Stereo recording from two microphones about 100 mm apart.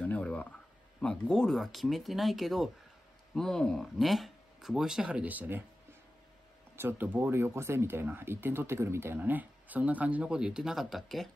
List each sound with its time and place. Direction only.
0.0 s a sound: 15° left (ahead or behind)
1.0 s speech: 10° left (ahead or behind); by 5.6 s 15° right (ahead or behind)
6.8 s speech: 20° right (ahead or behind); by 11.2 s centre (ahead or behind)